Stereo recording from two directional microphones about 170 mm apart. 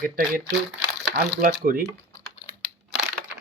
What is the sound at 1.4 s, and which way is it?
Speech, 60° right (ahead or behind).